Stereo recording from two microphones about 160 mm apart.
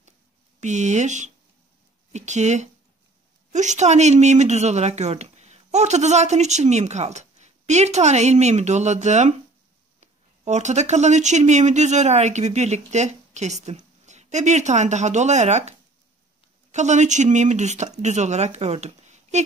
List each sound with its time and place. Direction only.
0.6 s speech: 50° right (ahead or behind)
16.7 s speech: 45° right (ahead or behind)